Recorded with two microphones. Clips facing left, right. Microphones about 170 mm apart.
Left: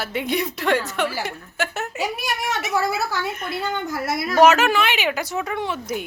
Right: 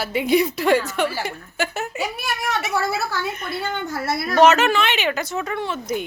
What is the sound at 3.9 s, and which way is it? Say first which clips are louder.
A woman's voice: even; 15° left (ahead or behind).